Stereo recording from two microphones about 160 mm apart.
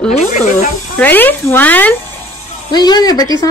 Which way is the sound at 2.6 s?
25° left (ahead or behind).